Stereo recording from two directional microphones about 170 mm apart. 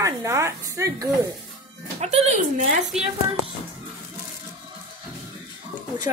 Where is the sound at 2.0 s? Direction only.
40° right (ahead or behind).